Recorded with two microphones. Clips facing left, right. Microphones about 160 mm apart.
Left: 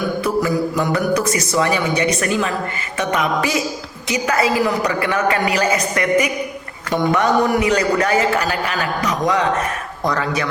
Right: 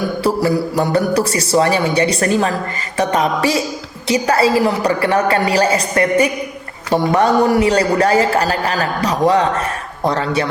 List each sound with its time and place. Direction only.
0.2 s a man's voice: 35° right (ahead or behind)